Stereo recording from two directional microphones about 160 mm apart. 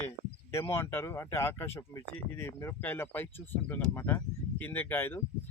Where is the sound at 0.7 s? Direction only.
15° left (ahead or behind).